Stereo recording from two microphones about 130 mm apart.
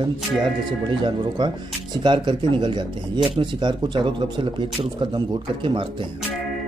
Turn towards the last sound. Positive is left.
turn(degrees=-40)  # may be behind; listen again after turning